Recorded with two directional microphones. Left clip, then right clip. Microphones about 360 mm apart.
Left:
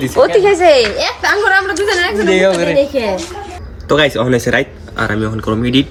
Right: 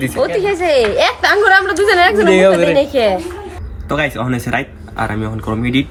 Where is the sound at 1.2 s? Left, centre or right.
Centre.